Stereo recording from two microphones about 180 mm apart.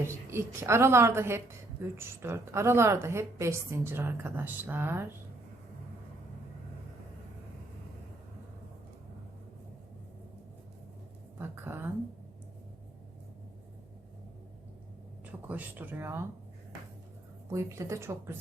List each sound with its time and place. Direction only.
0.0 s a woman's voice: 15° right (ahead or behind)
11.3 s a woman's voice: 15° right (ahead or behind)
15.3 s speech: 10° right (ahead or behind)
17.5 s a woman's voice: 15° right (ahead or behind)